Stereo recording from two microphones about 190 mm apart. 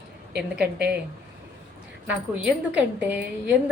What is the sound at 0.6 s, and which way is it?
Speech, 60° right (ahead or behind).